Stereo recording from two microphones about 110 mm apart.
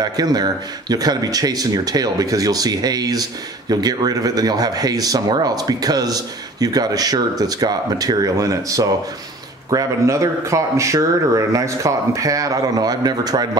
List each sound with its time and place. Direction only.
0.0 s speech: 35° right (ahead or behind)